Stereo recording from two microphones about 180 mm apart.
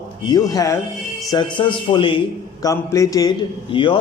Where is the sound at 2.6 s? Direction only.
15° left (ahead or behind).